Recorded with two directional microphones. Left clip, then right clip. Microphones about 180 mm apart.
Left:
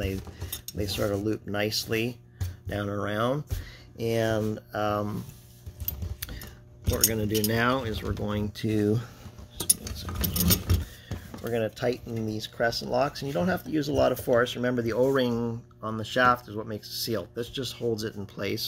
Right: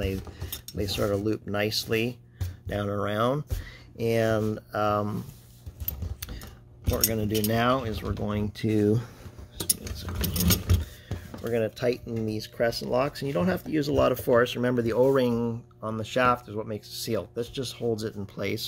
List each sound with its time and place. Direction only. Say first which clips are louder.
0.4 s cutlery: even; 35° right (ahead or behind)
0.7 s speech: right 1 dB; 50° right (ahead or behind)
7.1 s speech: right 1 dB; 50° right (ahead or behind); by 9.1 s 30° right (ahead or behind)
9.6 s keys jangling: left 1 dB; 20° right (ahead or behind)
11.1 s speech: right 2 dB; 35° right (ahead or behind); by 18.6 s 55° right (ahead or behind)